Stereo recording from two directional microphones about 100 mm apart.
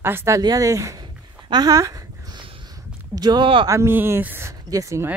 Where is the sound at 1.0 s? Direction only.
45° right (ahead or behind).